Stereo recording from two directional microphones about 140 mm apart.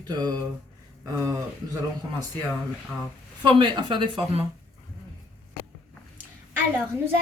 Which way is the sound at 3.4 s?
35° right (ahead or behind).